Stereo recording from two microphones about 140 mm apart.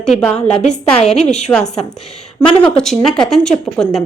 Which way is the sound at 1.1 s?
55° left (ahead or behind).